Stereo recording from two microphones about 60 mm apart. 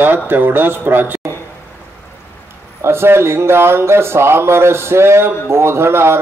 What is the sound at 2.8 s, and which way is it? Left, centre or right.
Speech, right.